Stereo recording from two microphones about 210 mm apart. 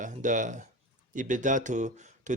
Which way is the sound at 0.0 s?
35° right (ahead or behind).